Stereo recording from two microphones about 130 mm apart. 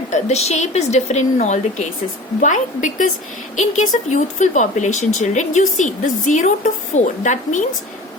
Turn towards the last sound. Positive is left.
turn(degrees=70)  # may be behind; listen again after turning